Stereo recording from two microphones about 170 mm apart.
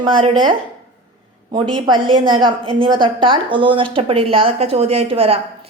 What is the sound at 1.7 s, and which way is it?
A woman's voice, 25° right (ahead or behind).